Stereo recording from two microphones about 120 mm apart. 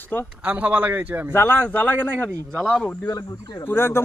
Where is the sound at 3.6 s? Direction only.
20° left (ahead or behind).